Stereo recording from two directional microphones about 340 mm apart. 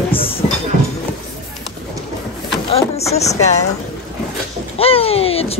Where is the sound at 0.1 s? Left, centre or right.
Centre.